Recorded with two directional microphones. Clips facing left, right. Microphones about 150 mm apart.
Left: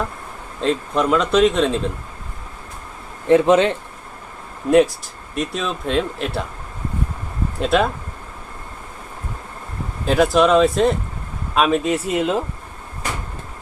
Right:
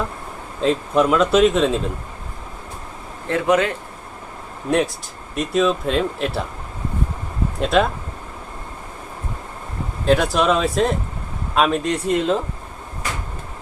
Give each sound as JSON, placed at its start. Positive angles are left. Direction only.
{"t": 0.6, "sound": "speech", "side_deg": 0}
{"t": 3.2, "sound": "speech", "side_deg": 20}
{"t": 5.3, "sound": "speech", "side_deg": 0}
{"t": 7.6, "sound": "speech", "side_deg": 0}
{"t": 10.1, "sound": "speech", "side_deg": 0}